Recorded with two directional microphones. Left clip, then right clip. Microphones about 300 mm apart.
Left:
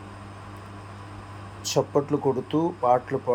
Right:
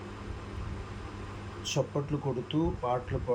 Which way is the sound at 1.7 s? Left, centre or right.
Centre.